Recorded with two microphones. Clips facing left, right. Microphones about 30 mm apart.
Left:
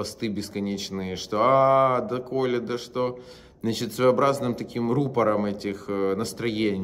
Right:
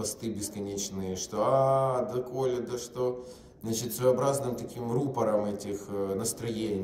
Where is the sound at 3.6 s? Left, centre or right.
Left.